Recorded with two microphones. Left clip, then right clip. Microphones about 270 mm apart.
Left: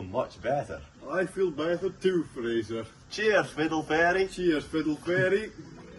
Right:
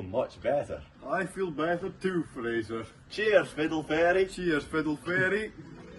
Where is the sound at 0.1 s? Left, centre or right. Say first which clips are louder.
Right 1 dB; centre.